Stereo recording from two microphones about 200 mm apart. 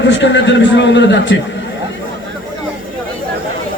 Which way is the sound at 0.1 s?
65° left (ahead or behind).